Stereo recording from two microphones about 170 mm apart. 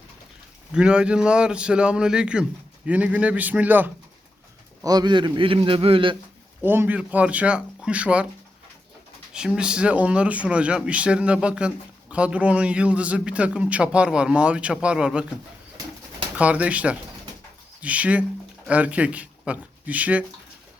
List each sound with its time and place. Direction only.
0.7 s a man's voice: 5° right (ahead or behind)
4.8 s a man's voice: 25° right (ahead or behind)
6.6 s speech: 10° right (ahead or behind)
9.3 s speech: 5° right (ahead or behind)
16.4 s speech: 10° right (ahead or behind)